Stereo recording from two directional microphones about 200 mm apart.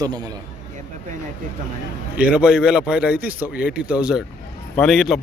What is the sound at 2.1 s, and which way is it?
Speech, 5° right (ahead or behind).